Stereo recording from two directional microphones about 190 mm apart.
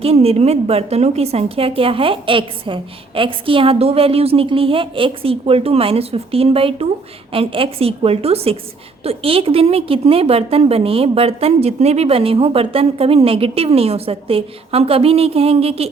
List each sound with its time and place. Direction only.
0.0 s a woman's voice: 30° right (ahead or behind)